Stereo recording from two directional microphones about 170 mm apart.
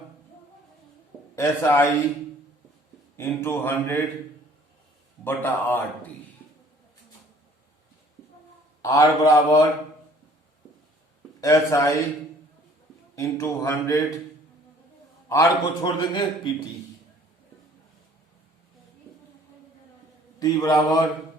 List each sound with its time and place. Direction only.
1.4 s speech: 15° left (ahead or behind)
3.2 s speech: 15° left (ahead or behind)
5.2 s speech: 10° left (ahead or behind)
8.8 s a man's voice: 20° left (ahead or behind)
11.3 s speech: 20° left (ahead or behind)
13.1 s speech: 20° left (ahead or behind)
15.3 s a man's voice: 20° left (ahead or behind)
20.4 s a man's voice: 20° left (ahead or behind)